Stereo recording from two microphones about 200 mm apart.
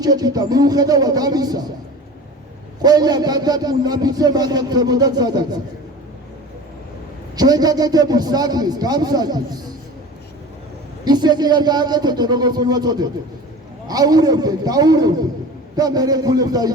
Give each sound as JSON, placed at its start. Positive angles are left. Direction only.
{"t": 0.0, "sound": "a man's voice", "side_deg": -20}
{"t": 2.8, "sound": "a man's voice", "side_deg": -20}
{"t": 7.3, "sound": "a man's voice", "side_deg": -20}
{"t": 11.0, "sound": "a man's voice", "side_deg": -20}